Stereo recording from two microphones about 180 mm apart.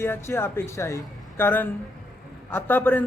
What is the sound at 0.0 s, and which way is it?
A man's voice, 15° left (ahead or behind).